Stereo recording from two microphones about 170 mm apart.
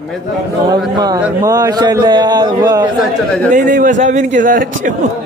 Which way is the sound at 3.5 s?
50° right (ahead or behind).